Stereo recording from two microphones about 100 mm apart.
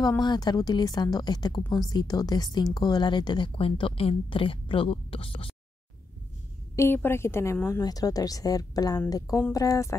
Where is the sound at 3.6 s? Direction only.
65° left (ahead or behind).